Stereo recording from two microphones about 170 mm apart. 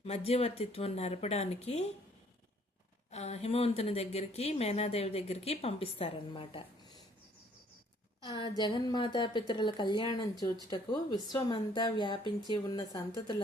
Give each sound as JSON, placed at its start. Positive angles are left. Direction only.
{"t": 0.0, "sound": "speech", "side_deg": 35}
{"t": 3.1, "sound": "speech", "side_deg": 40}
{"t": 8.2, "sound": "a woman's voice", "side_deg": 25}